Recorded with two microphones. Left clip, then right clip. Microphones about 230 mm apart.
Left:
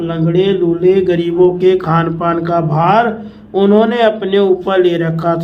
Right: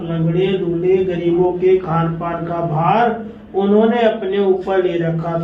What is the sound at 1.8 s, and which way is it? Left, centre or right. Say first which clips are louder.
A man's voice: left 6 dB; left.